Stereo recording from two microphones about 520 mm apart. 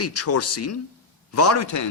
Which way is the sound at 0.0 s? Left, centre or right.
Left.